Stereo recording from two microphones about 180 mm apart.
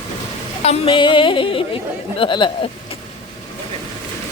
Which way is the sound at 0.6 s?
30° left (ahead or behind).